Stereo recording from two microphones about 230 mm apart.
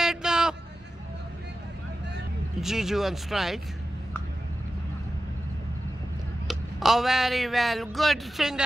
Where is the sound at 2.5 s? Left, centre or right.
Centre.